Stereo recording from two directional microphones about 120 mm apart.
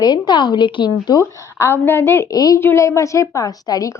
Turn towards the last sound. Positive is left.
turn(degrees=30)  # may be behind; listen again after turning